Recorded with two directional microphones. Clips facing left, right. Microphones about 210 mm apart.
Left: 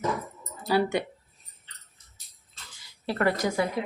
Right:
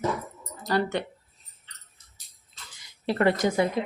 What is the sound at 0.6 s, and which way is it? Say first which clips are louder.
Speech: left 2 dB; 5° left (ahead or behind).